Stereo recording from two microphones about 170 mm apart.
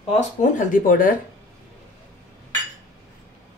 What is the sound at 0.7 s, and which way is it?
Speech, 55° left (ahead or behind).